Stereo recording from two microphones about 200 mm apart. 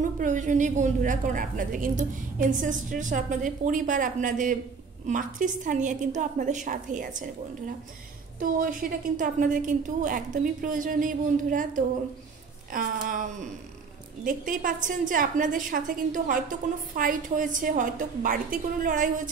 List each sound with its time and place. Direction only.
0.2 s a woman's voice: 40° right (ahead or behind)